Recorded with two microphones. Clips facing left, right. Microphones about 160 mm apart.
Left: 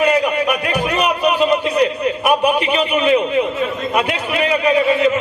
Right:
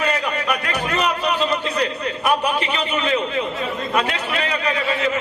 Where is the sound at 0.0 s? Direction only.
15° left (ahead or behind).